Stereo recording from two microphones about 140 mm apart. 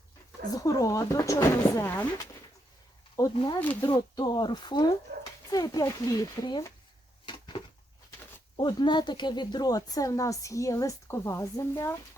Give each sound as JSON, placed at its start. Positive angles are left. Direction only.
{"t": 0.5, "sound": "a woman's voice", "side_deg": 25}
{"t": 3.3, "sound": "a woman's voice", "side_deg": 30}
{"t": 7.3, "sound": "a sound", "side_deg": 35}
{"t": 8.5, "sound": "a woman's voice", "side_deg": 35}